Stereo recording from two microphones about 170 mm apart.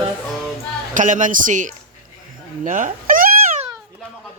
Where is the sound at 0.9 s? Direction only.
50° right (ahead or behind).